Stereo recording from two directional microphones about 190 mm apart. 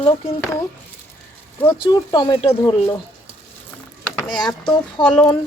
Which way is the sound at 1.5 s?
20° left (ahead or behind).